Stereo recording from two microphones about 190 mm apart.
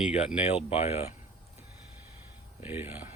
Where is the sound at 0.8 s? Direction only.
35° left (ahead or behind).